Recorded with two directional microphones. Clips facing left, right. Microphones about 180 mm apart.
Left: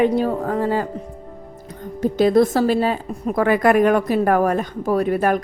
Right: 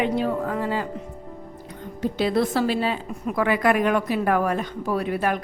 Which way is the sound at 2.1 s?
45° left (ahead or behind).